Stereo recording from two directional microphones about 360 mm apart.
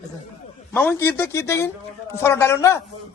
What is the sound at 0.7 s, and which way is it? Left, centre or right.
A man's voice, centre.